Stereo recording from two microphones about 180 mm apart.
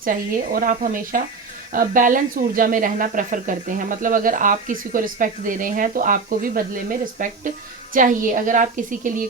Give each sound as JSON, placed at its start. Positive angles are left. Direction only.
{"t": 0.0, "sound": "speech", "side_deg": -50}